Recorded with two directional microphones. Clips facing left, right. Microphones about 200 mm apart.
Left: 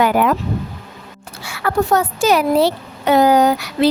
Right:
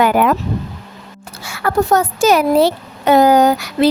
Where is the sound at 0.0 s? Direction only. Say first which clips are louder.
Right 2 dB; 60° right (ahead or behind).